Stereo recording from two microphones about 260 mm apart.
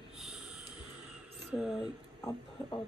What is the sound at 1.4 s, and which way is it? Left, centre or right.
Speech, centre.